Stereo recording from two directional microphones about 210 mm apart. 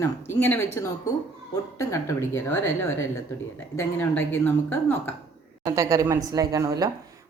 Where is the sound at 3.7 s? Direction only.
10° left (ahead or behind).